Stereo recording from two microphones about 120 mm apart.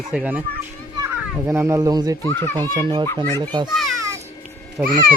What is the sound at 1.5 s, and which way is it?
Speech, 25° right (ahead or behind).